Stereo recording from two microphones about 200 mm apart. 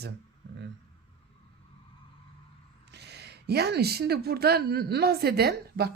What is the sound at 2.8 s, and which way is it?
A woman's voice, 55° right (ahead or behind).